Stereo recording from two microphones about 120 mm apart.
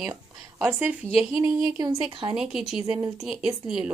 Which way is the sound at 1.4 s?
35° right (ahead or behind).